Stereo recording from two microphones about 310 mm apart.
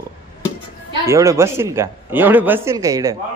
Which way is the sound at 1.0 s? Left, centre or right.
Centre.